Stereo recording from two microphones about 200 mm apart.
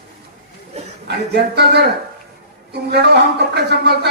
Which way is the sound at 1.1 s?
55° right (ahead or behind).